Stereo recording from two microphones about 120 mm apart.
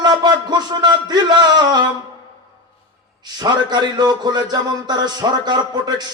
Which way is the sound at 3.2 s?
35° right (ahead or behind).